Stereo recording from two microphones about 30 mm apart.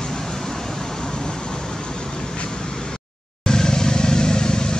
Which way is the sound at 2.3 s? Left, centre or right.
Left.